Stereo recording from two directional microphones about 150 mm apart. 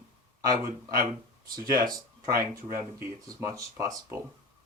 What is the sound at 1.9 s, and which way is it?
Speech, 20° right (ahead or behind).